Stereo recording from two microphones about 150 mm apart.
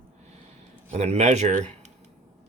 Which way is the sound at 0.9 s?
45° right (ahead or behind).